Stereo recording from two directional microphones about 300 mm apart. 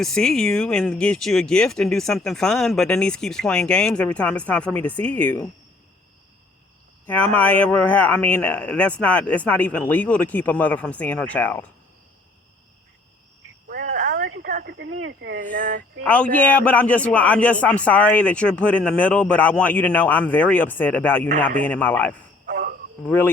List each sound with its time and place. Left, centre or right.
0.0 s speech: centre
7.0 s speech: centre
13.7 s cricket: right
14.3 s speech: right
16.0 s speech: centre
22.4 s cricket: right
23.0 s speech: centre